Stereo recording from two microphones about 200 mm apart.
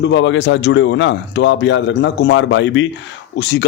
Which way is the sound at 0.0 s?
60° left (ahead or behind).